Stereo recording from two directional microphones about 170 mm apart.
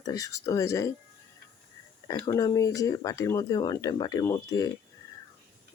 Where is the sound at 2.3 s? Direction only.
20° left (ahead or behind).